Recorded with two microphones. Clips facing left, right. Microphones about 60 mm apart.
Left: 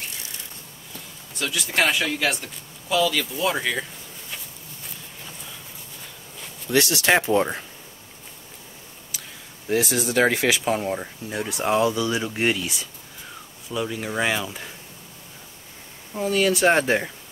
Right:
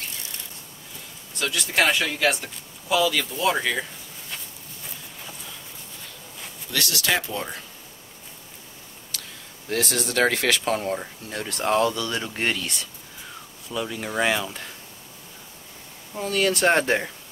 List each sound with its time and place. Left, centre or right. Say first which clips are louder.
1.4 s speech: even; centre
6.7 s speech: left 6 dB; left
9.1 s a sound: right 1 dB; centre
9.7 s speech: left 3 dB; centre
16.1 s speech: left 2 dB; centre